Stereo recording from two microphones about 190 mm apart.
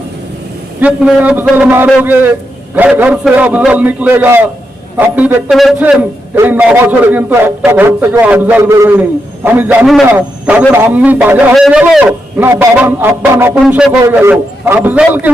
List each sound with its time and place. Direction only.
0.8 s a man's voice: 5° right (ahead or behind)